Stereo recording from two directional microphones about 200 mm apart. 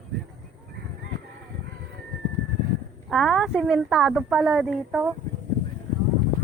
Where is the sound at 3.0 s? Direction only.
Centre (ahead or behind).